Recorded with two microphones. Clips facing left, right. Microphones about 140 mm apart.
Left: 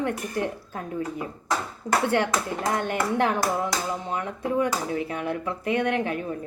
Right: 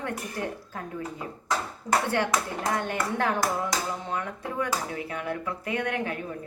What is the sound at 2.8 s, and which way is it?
Speech, 25° left (ahead or behind).